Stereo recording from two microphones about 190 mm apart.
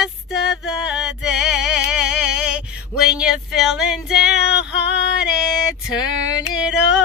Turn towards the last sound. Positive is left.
turn(degrees=-5)  # may be behind; listen again after turning